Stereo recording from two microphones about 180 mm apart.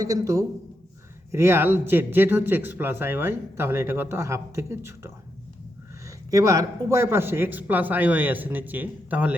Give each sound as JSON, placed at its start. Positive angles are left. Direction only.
{"t": 0.0, "sound": "a man's voice", "side_deg": -20}
{"t": 6.3, "sound": "speech", "side_deg": -20}